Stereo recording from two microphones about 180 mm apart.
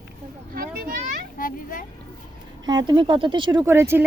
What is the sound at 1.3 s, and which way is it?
Children playing, 50° left (ahead or behind).